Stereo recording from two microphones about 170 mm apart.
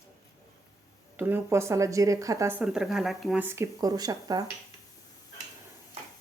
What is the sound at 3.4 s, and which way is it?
Speech, 15° right (ahead or behind).